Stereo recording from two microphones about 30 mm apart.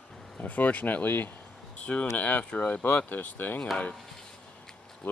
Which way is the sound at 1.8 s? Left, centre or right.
Left.